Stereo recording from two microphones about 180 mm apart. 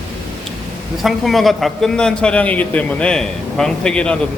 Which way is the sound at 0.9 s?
Centre (ahead or behind).